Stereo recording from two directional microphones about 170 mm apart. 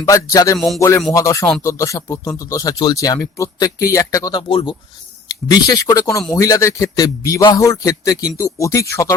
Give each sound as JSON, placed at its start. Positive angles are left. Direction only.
{"t": 0.0, "sound": "speech", "side_deg": 20}
{"t": 0.8, "sound": "music", "side_deg": 15}
{"t": 1.1, "sound": "speech", "side_deg": 20}